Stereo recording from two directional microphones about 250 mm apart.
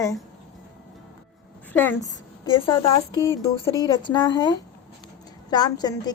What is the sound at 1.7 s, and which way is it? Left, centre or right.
Speech, centre.